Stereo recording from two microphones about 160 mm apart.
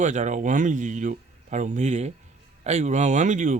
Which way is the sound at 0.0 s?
50° right (ahead or behind).